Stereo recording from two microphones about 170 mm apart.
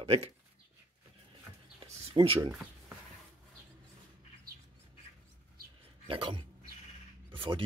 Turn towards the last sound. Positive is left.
turn(degrees=-30)  # may be behind; listen again after turning